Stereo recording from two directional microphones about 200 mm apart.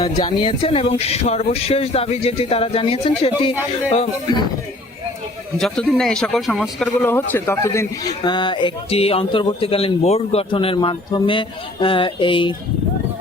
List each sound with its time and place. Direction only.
0.0 s speech: 25° left (ahead or behind)
5.5 s a man's voice: 5° left (ahead or behind); by 12.5 s 25° left (ahead or behind)